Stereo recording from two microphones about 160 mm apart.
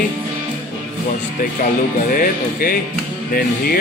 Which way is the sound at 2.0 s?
65° left (ahead or behind).